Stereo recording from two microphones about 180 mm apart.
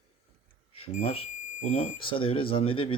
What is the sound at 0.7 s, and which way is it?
Speech, 35° left (ahead or behind).